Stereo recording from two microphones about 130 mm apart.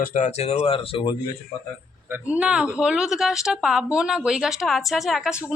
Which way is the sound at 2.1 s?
10° right (ahead or behind).